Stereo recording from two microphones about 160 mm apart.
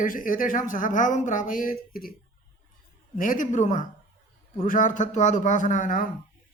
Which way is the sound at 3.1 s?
60° left (ahead or behind).